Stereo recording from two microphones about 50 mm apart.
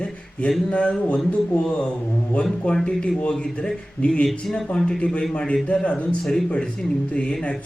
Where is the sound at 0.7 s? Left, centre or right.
Centre.